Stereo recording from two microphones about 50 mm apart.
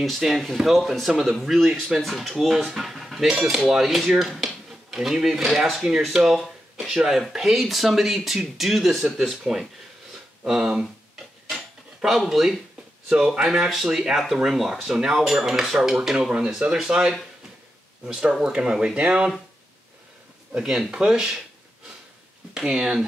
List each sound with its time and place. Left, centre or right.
0.0 s speech: centre
11.4 s cutlery: centre
12.2 s speech: centre
13.1 s speech: centre
20.6 s speech: centre
22.5 s speech: centre